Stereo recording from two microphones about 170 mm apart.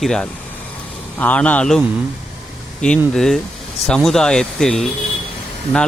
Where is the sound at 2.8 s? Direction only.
5° left (ahead or behind).